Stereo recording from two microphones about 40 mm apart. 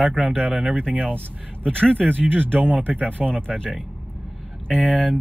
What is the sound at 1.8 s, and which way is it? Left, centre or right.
Speech, right.